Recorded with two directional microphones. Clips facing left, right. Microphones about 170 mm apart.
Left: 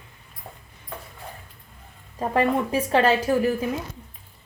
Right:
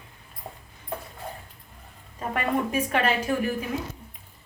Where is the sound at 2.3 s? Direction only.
30° left (ahead or behind).